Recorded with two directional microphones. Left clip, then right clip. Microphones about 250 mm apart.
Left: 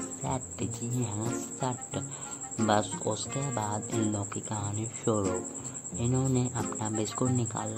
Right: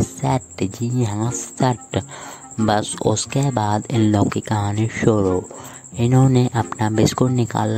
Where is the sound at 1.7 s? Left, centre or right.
Right.